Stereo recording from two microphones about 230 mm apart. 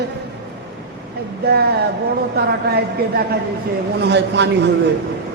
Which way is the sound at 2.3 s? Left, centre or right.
Right.